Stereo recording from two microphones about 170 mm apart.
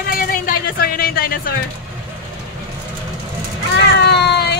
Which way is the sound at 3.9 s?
80° left.